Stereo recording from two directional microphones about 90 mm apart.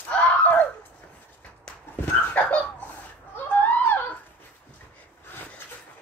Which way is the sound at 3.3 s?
20° left (ahead or behind).